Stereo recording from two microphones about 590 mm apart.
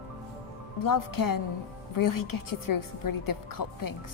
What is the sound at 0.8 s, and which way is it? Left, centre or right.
A woman's voice, left.